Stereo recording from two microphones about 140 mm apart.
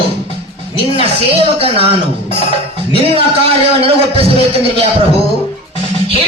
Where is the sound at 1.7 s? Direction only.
45° right (ahead or behind).